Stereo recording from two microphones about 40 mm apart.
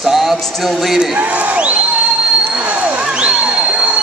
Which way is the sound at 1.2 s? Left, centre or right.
Right.